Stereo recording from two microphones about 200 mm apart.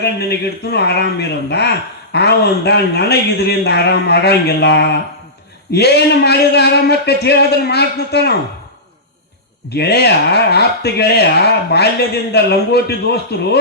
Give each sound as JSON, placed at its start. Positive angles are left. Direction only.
{"t": 0.0, "sound": "speech", "side_deg": 55}
{"t": 9.6, "sound": "speech", "side_deg": 55}